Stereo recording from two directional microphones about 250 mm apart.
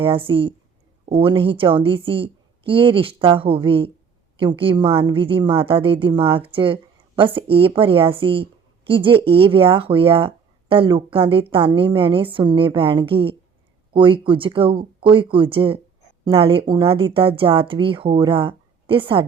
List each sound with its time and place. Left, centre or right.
0.0 s speech: right